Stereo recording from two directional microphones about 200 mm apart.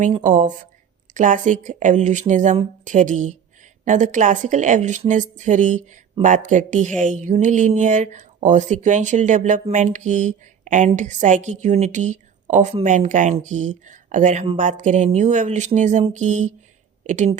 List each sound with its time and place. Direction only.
0.0 s speech: 40° right (ahead or behind)